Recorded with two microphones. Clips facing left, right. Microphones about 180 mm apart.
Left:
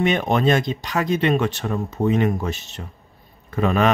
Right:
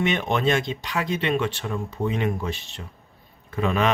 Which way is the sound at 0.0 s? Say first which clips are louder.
Left 4 dB; 40° left (ahead or behind).